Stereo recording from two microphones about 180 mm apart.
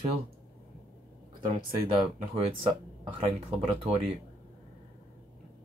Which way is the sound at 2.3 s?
30° right (ahead or behind).